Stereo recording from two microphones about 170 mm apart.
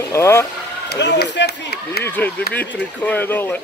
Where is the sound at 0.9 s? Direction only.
80° left.